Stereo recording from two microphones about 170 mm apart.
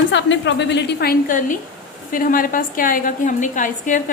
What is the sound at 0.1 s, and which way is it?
A woman's voice, 90° left.